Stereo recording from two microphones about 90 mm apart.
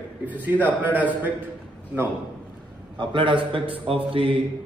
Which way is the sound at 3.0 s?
65° right (ahead or behind).